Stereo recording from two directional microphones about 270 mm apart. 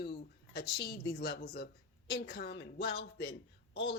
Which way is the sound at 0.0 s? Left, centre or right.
Left.